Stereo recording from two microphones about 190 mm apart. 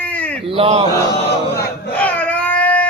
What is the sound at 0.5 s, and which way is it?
Speech, 30° right (ahead or behind).